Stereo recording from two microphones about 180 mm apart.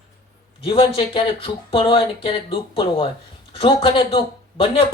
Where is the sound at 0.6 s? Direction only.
30° left (ahead or behind).